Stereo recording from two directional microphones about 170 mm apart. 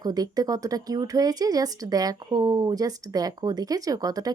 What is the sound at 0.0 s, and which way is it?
Speech, 20° right (ahead or behind).